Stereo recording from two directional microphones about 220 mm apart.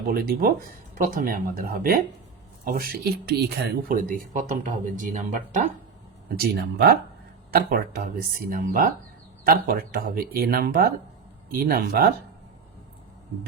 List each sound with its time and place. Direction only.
0.1 s speech: 45° right (ahead or behind)